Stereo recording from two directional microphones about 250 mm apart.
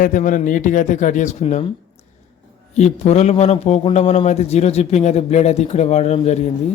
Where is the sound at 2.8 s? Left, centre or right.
Left.